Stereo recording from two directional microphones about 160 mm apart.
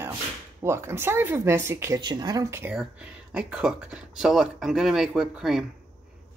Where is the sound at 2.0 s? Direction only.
25° right (ahead or behind).